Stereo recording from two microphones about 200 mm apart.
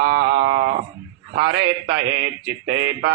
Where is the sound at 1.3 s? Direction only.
55° right (ahead or behind).